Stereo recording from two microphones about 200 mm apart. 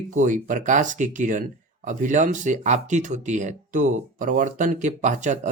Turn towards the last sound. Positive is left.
turn(degrees=-35)  # may be behind; listen again after turning